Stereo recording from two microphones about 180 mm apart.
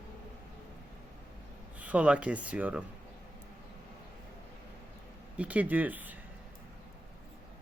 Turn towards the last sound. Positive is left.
turn(degrees=-10)  # may be behind; listen again after turning